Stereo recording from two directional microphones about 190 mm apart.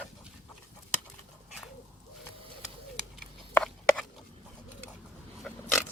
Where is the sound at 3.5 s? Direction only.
Centre (ahead or behind).